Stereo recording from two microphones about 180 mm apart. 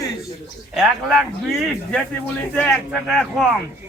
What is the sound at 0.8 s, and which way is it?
Speech, centre (ahead or behind).